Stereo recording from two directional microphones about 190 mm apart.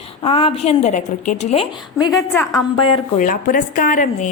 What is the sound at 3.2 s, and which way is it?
Speech, 45° left (ahead or behind).